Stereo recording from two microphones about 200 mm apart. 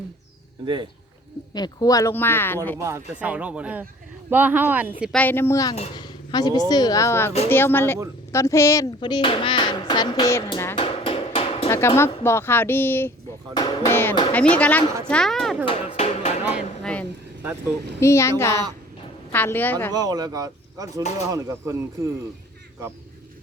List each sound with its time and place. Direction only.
0.6 s speech: 25° right (ahead or behind)
1.5 s speech: 20° left (ahead or behind)
2.7 s speech: 15° right (ahead or behind)
5.1 s speech: 10° left (ahead or behind)
5.7 s a child's voice: 30° left (ahead or behind)
6.3 s speech: 20° left (ahead or behind)
10.8 s a sound: 25° left (ahead or behind)
11.9 s speech: 10° left (ahead or behind)
13.5 s speech: 20° left (ahead or behind)
13.9 s a woman's voice: 10° left (ahead or behind)
15.6 s music: 30° left (ahead or behind)
16.8 s a sound: 5° left (ahead or behind)
18.0 s speech: 15° left (ahead or behind)
19.9 s speech: 20° right (ahead or behind)